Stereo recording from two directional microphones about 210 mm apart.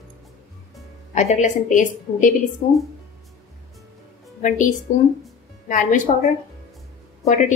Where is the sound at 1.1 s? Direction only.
35° left (ahead or behind).